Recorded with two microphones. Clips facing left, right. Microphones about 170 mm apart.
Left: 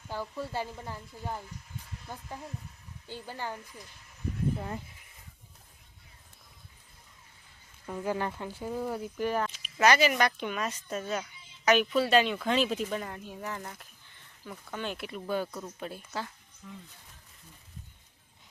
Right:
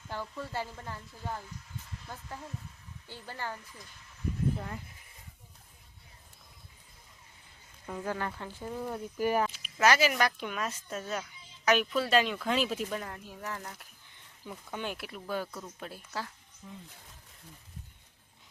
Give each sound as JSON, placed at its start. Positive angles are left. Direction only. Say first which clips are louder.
{"t": 0.1, "sound": "speech", "louder": "left 2 dB", "side_deg": 10}
{"t": 3.1, "sound": "speech", "louder": "left 2 dB", "side_deg": 15}
{"t": 7.9, "sound": "a woman's voice", "louder": "left 3 dB", "side_deg": 0}
{"t": 8.1, "sound": "a woman's voice", "louder": "left 3 dB", "side_deg": 15}
{"t": 14.4, "sound": "a woman's voice", "louder": "left 1 dB", "side_deg": -15}
{"t": 16.6, "sound": "speech", "louder": "left 1 dB", "side_deg": -25}